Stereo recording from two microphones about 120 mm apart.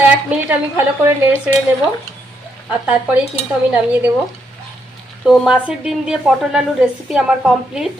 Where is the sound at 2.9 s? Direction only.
10° right (ahead or behind).